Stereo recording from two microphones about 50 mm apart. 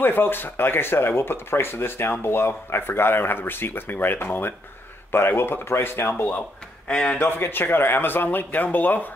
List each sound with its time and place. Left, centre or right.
0.0 s speech: left
6.9 s speech: left
7.3 s speech: left